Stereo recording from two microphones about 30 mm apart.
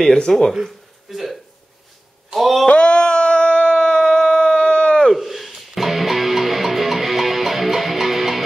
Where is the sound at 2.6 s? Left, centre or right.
Left.